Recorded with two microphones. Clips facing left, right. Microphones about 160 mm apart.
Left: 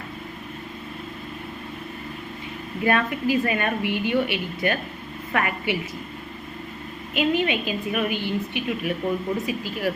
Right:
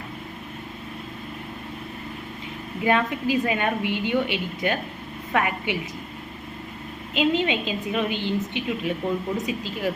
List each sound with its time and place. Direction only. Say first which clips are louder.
2.8 s a woman's voice: even; 15° right (ahead or behind)
7.1 s a woman's voice: even; 20° right (ahead or behind)